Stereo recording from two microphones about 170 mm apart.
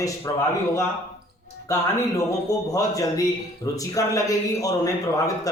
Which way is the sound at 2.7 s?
20° left (ahead or behind).